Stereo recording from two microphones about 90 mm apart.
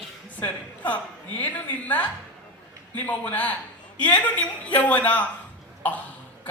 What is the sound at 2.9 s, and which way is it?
Speech, 15° left (ahead or behind).